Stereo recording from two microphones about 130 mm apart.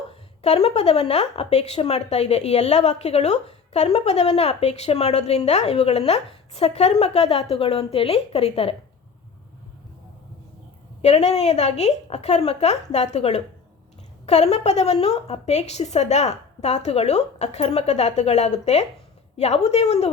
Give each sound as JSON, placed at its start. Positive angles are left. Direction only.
{"t": 0.1, "sound": "a woman's voice", "side_deg": 55}
{"t": 11.0, "sound": "speech", "side_deg": 60}